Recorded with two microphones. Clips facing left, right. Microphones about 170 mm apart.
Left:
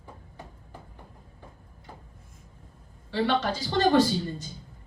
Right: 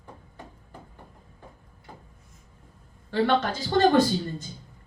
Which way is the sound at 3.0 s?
50° right (ahead or behind).